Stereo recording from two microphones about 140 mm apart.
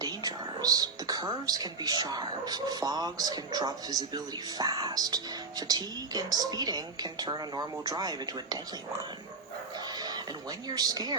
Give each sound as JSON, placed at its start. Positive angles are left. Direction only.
{"t": 0.0, "sound": "speech", "side_deg": -30}
{"t": 10.7, "sound": "speech", "side_deg": -25}